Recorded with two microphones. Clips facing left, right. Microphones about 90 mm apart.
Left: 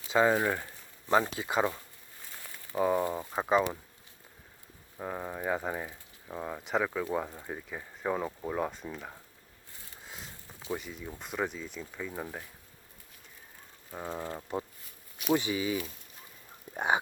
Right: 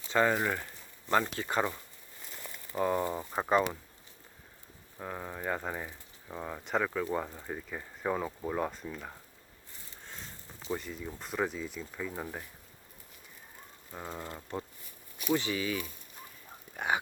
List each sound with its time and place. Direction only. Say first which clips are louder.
0.1 s speech: left 2 dB; 10° left (ahead or behind)
4.9 s speech: left 3 dB; 10° left (ahead or behind)
10.0 s a sound: even; 5° left (ahead or behind)
11.2 s speech: right 1 dB; centre (ahead or behind)
13.9 s speech: left 4 dB; 10° left (ahead or behind); by 17.0 s 25° left (ahead or behind)